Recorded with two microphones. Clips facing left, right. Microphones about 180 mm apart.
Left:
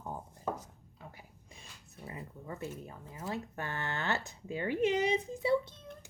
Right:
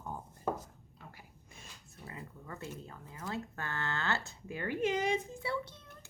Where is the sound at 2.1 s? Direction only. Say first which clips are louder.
Left 3 dB; 20° left (ahead or behind).